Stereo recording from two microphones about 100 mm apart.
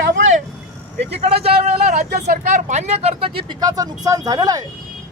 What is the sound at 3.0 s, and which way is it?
Speech, 80° right.